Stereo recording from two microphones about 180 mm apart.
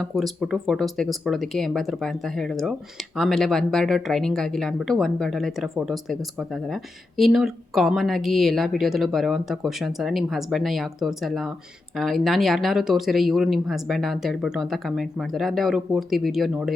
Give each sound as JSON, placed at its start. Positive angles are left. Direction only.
{"t": 0.0, "sound": "speech", "side_deg": 0}